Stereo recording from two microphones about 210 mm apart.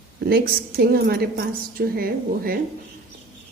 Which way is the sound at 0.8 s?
45° right (ahead or behind).